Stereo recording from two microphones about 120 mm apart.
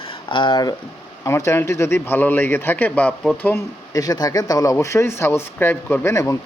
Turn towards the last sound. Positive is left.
turn(degrees=25)  # may be behind; listen again after turning